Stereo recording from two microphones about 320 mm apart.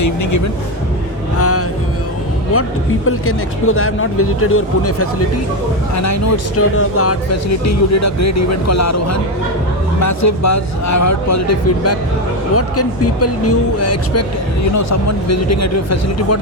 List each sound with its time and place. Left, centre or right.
0.0 s speech: left
1.4 s music: left
3.1 s speech: left
5.9 s speech: left